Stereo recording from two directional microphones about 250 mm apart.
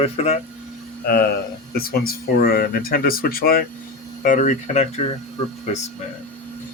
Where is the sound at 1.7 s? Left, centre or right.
Left.